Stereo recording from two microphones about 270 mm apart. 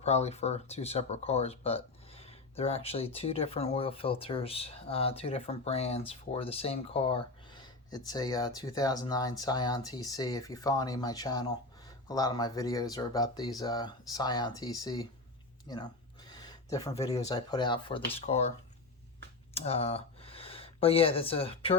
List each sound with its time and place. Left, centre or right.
0.0 s speech: left
19.5 s speech: left